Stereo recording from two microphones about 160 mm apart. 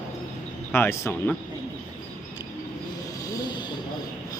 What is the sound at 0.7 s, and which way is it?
Speech, 15° left (ahead or behind).